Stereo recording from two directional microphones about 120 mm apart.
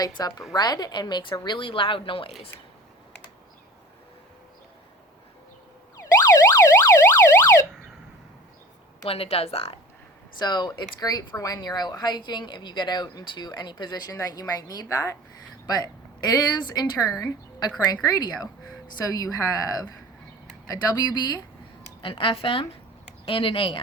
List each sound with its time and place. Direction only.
0.0 s a woman's voice: 35° left (ahead or behind); by 2.3 s 50° left (ahead or behind)
6.0 s emergency vehicle: 30° left (ahead or behind)
9.0 s speech: 55° left (ahead or behind)
10.3 s a woman's voice: 35° left (ahead or behind)
22.0 s a woman's voice: 45° left (ahead or behind)